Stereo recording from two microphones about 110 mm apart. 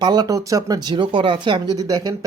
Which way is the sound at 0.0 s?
40° right (ahead or behind).